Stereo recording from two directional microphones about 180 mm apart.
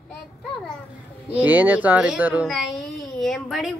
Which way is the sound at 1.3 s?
10° right (ahead or behind).